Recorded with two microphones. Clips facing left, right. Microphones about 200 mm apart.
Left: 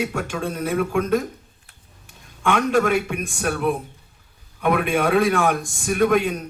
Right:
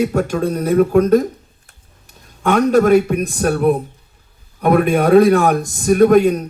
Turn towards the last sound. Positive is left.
turn(degrees=-40)  # may be behind; listen again after turning